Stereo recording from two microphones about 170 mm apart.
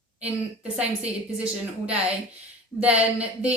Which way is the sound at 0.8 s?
5° right (ahead or behind).